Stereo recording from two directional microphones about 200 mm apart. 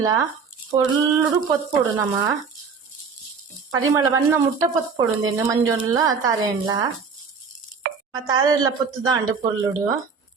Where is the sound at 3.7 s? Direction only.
15° right (ahead or behind).